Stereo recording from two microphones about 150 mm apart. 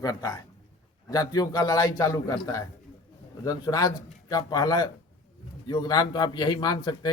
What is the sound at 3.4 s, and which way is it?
Speech, 25° left (ahead or behind).